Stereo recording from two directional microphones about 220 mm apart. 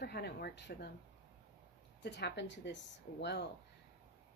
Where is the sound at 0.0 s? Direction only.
45° left (ahead or behind).